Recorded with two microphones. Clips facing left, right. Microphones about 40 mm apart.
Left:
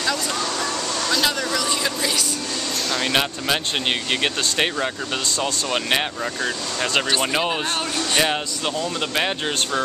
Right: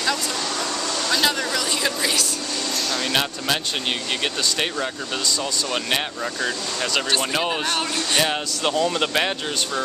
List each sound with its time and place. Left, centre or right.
1.1 s a sound: centre
2.9 s speech: centre
5.4 s speech: centre
7.2 s speech: centre
8.6 s speech: centre